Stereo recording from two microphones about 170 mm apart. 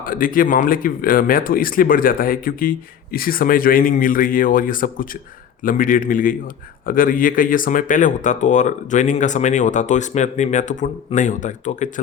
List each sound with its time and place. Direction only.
0.0 s speech: 55° left (ahead or behind)